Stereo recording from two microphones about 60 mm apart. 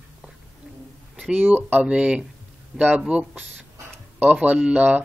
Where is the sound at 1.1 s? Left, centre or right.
Right.